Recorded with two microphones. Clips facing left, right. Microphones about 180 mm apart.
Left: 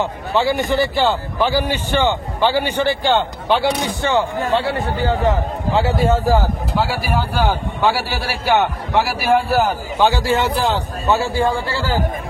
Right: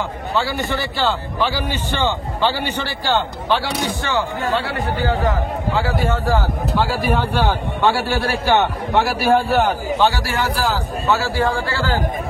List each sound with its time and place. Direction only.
0.0 s a man's voice: 20° left (ahead or behind)
7.2 s a man's voice: 5° left (ahead or behind)
9.9 s a man's voice: 15° left (ahead or behind)